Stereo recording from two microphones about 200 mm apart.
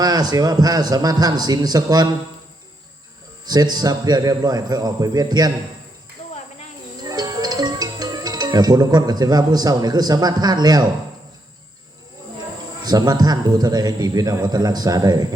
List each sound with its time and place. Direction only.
0.0 s a man's voice: 20° right (ahead or behind)
3.4 s a man's voice: 20° right (ahead or behind)
7.1 s speech: 20° right (ahead or behind)
12.8 s a man's voice: 20° right (ahead or behind)